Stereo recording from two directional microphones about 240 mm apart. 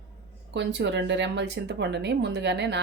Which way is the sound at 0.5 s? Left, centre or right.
Right.